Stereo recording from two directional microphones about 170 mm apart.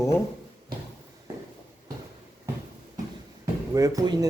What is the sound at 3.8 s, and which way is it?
Speech, 20° right (ahead or behind).